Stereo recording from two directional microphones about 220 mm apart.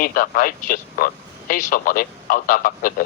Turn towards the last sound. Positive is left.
turn(degrees=40)  # may be behind; listen again after turning